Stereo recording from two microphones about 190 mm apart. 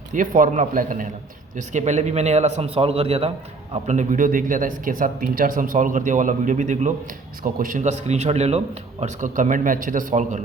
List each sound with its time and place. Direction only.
0.1 s a man's voice: 45° right (ahead or behind)